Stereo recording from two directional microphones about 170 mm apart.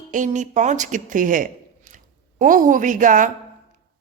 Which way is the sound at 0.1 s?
50° right (ahead or behind).